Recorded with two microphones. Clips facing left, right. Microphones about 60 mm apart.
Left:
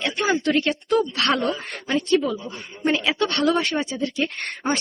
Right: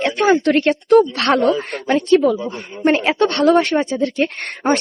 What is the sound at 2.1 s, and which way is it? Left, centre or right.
A woman's voice, right.